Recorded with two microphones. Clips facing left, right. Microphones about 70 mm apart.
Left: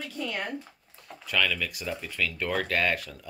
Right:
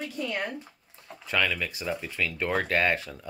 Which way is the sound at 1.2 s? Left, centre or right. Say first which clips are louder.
Right 1 dB; centre.